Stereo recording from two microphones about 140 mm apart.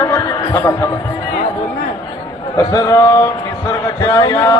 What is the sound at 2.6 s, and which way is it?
Speech, 25° left (ahead or behind).